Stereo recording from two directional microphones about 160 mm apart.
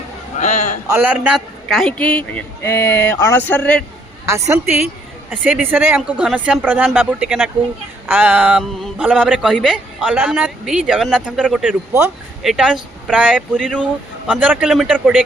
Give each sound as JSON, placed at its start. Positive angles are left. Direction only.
{"t": 0.3, "sound": "a sound", "side_deg": 45}
{"t": 0.9, "sound": "a man's voice", "side_deg": -10}
{"t": 4.3, "sound": "a man's voice", "side_deg": -20}